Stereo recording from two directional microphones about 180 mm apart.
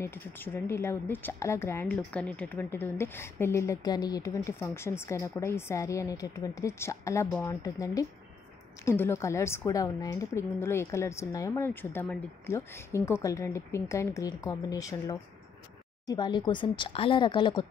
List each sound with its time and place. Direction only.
0.0 s a woman's voice: 10° left (ahead or behind)